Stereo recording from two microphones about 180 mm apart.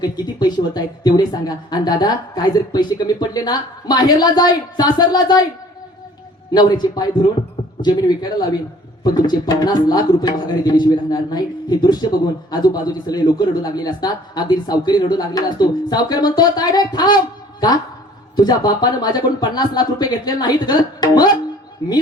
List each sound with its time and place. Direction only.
0.0 s speech: 20° left (ahead or behind)
6.5 s speech: 20° left (ahead or behind)
18.3 s speech: 20° left (ahead or behind)